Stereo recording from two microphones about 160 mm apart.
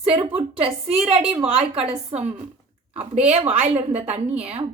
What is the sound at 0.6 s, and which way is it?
A woman's voice, 35° right (ahead or behind).